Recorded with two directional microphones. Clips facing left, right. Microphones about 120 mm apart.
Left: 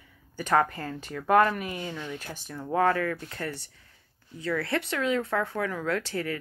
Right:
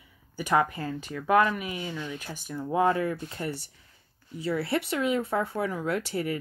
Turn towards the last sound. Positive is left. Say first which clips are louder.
# right 1 dB
turn(degrees=-15)  # may be behind; listen again after turning